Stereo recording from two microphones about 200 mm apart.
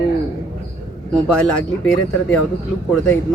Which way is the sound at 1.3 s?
5° left (ahead or behind).